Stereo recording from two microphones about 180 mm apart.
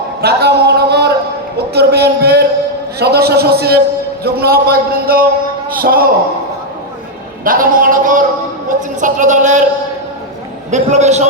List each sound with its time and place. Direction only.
0.2 s a sound: 65° right (ahead or behind)
1.5 s a man's voice: 60° right (ahead or behind)
7.4 s a man's voice: 50° right (ahead or behind)
10.7 s a man's voice: 40° right (ahead or behind)